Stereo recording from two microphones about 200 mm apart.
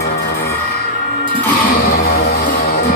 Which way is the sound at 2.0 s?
50° left (ahead or behind).